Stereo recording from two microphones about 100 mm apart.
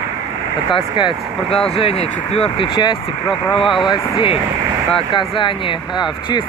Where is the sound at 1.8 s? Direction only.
75° left (ahead or behind).